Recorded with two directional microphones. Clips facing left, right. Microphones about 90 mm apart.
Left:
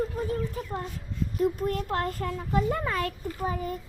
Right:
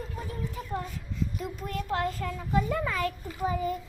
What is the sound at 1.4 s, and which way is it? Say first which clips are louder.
A child's voice: left 8 dB; 50° left (ahead or behind).